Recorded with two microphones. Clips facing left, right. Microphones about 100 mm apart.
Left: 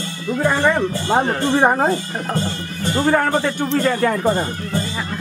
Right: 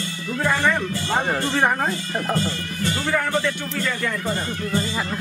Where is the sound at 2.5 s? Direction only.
45° left (ahead or behind).